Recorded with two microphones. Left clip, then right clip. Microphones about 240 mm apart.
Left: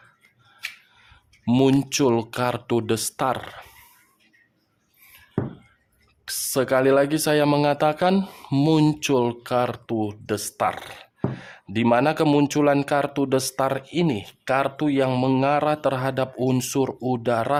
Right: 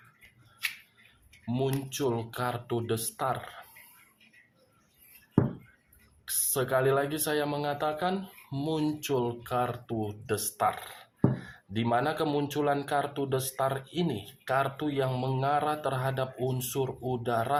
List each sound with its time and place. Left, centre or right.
1.5 s speech: left
6.2 s speech: left